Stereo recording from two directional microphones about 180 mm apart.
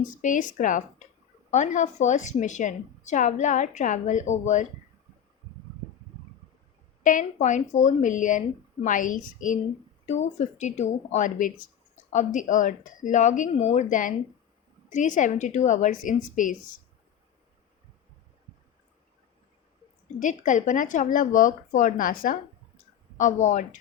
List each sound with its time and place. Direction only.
0.2 s a woman's voice: 45° left (ahead or behind)
7.0 s a woman's voice: 45° left (ahead or behind)
20.1 s a woman's voice: 45° left (ahead or behind)
23.1 s a woman's voice: 45° left (ahead or behind)